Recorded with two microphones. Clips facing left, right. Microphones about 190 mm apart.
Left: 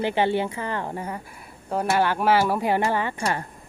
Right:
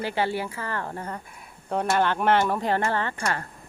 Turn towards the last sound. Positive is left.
turn(degrees=15)  # may be behind; listen again after turning